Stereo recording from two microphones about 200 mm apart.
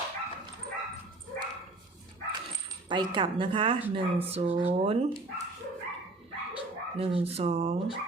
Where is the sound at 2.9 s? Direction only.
25° right (ahead or behind).